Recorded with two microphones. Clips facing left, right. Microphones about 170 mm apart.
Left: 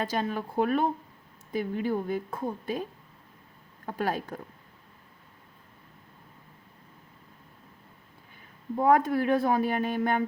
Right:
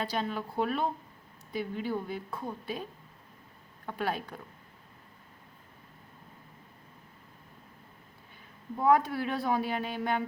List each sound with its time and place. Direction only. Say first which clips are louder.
0.0 s a woman's voice: left 3 dB; 45° left (ahead or behind)
3.8 s a woman's voice: left 3 dB; 45° left (ahead or behind)
8.8 s a woman's voice: left 3 dB; 50° left (ahead or behind)